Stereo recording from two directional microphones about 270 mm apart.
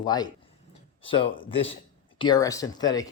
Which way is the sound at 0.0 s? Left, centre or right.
Centre.